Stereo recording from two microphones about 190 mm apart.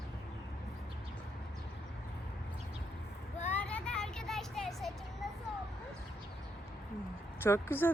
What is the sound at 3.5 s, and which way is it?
Vehicle, 10° left (ahead or behind).